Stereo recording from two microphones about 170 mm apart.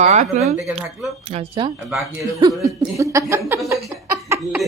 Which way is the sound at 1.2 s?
40° right (ahead or behind).